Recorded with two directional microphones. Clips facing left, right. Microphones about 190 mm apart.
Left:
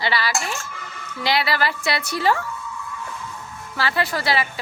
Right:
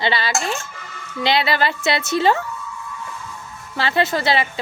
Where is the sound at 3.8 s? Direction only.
25° right (ahead or behind).